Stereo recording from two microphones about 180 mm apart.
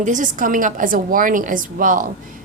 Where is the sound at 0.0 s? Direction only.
45° right (ahead or behind).